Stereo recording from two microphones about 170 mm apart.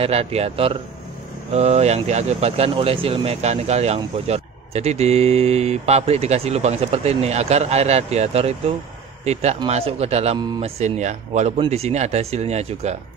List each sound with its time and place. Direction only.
0.0 s speech: 35° right (ahead or behind)